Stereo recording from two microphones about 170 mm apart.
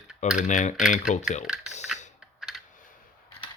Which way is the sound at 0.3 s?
45° left (ahead or behind).